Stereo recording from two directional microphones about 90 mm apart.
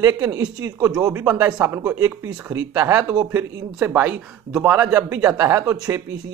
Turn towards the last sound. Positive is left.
turn(degrees=-35)  # may be behind; listen again after turning